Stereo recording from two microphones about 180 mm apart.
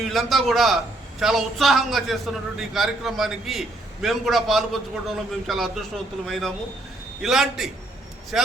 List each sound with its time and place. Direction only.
0.0 s a man's voice: centre (ahead or behind)